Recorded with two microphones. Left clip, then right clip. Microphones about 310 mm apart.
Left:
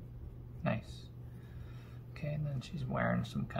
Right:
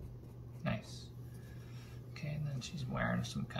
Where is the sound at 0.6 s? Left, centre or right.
Centre.